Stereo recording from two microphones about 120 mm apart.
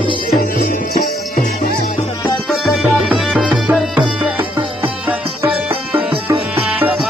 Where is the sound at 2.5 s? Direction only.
Centre (ahead or behind).